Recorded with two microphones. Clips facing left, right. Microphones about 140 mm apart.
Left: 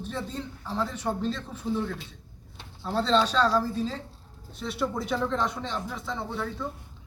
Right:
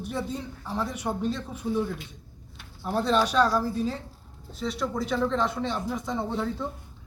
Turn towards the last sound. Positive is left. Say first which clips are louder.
# right 3 dB
turn(degrees=-20)  # may be behind; listen again after turning